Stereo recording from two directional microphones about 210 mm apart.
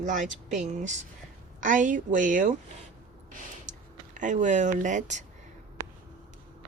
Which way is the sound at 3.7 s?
60° right (ahead or behind).